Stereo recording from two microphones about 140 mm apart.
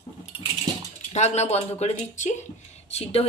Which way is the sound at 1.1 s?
55° left (ahead or behind).